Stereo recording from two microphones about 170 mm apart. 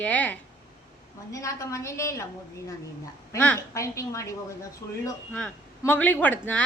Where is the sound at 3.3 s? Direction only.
10° left (ahead or behind).